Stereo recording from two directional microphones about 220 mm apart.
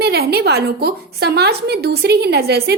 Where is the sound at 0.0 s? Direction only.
45° right (ahead or behind).